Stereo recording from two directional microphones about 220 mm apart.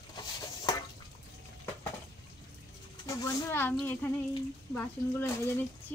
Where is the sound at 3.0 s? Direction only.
15° left (ahead or behind).